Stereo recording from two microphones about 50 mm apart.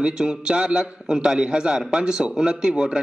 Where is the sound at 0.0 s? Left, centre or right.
Centre.